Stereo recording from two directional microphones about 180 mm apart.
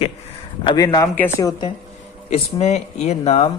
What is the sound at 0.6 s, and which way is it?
Speech, 25° left (ahead or behind).